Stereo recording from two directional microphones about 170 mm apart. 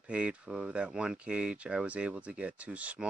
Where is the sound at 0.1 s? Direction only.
5° right (ahead or behind).